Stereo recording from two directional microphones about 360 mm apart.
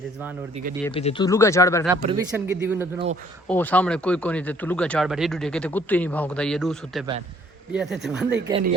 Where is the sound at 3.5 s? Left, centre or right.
Centre.